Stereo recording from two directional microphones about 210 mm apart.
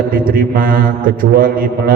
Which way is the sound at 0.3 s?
45° right (ahead or behind).